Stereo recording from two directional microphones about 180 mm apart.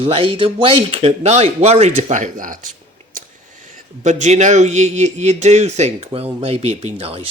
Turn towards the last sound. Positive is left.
turn(degrees=-35)  # may be behind; listen again after turning